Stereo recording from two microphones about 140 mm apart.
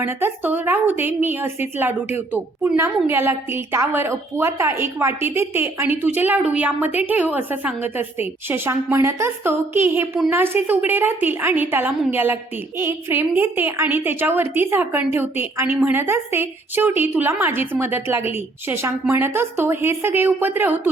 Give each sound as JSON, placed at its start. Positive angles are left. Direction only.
{"t": 0.0, "sound": "a woman's voice", "side_deg": -15}